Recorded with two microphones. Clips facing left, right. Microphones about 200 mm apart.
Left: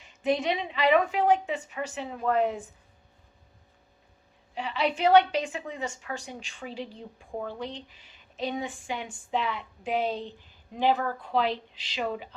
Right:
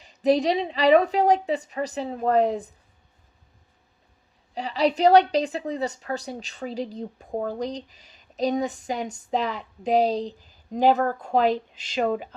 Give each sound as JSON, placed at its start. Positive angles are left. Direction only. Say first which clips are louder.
{"t": 0.0, "sound": "a woman's voice", "louder": "right 6 dB", "side_deg": -35}
{"t": 4.5, "sound": "a woman's voice", "louder": "right 6 dB", "side_deg": -35}